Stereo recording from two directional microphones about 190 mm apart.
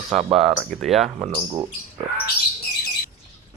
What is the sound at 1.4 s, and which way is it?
Speech, 15° right (ahead or behind).